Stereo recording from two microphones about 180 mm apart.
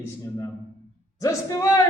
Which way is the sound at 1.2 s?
20° left (ahead or behind).